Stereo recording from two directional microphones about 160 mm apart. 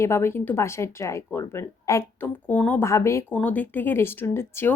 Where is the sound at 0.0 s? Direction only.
15° left (ahead or behind).